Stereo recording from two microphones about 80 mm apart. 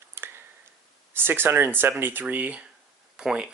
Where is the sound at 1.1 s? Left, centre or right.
Right.